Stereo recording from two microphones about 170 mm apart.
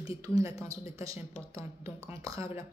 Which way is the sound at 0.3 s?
20° right (ahead or behind).